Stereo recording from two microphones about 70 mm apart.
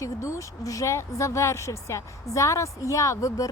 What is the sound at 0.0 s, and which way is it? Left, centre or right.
Speech, left.